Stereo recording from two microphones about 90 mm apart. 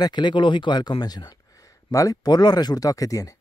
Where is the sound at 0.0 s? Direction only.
55° left (ahead or behind).